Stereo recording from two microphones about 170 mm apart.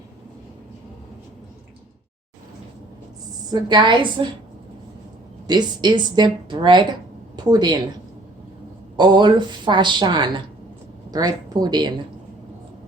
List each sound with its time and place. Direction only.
3.5 s a woman's voice: 25° right (ahead or behind)
5.5 s a woman's voice: 25° right (ahead or behind)
9.0 s a woman's voice: 25° right (ahead or behind)